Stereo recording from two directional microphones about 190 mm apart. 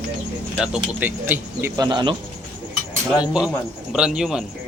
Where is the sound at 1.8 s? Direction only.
25° right (ahead or behind).